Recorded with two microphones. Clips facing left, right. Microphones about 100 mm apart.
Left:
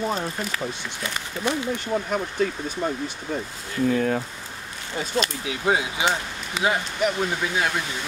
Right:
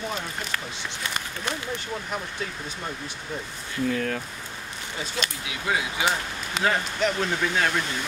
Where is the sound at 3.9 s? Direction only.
15° left (ahead or behind).